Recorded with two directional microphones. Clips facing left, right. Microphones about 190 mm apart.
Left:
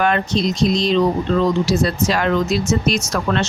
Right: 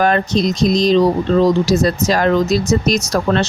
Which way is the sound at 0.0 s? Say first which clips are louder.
Right 3 dB; 40° right (ahead or behind).